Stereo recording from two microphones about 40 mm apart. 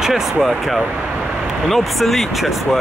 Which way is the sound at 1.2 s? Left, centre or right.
Centre.